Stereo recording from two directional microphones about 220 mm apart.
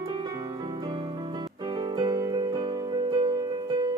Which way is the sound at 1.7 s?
20° right (ahead or behind).